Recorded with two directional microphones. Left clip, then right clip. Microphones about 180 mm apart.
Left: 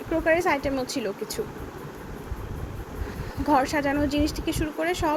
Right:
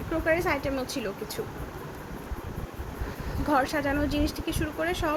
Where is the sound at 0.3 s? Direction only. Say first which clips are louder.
Left 3 dB; 15° left (ahead or behind).